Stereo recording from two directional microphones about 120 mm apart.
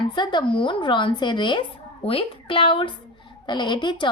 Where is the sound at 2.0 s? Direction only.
50° left (ahead or behind).